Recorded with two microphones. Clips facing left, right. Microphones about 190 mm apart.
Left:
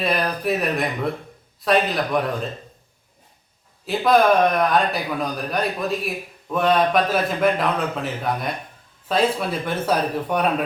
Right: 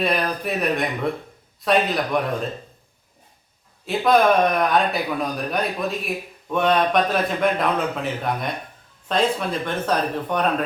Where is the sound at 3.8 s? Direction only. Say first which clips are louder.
Even; centre (ahead or behind).